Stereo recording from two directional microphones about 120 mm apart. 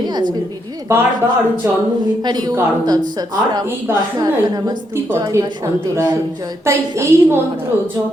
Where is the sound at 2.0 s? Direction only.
35° right (ahead or behind).